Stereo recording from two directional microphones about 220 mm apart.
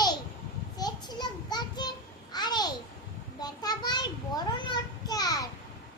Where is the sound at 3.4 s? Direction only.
20° left (ahead or behind).